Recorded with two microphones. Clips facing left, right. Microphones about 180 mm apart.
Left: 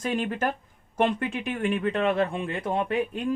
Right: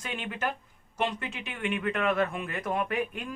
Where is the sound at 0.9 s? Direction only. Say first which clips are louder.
Left 7 dB; 50° left (ahead or behind).